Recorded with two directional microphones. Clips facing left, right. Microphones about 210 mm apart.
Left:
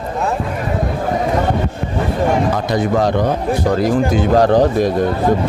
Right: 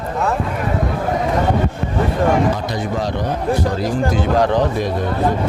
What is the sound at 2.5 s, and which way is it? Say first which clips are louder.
Speech: left 6 dB; 50° left (ahead or behind).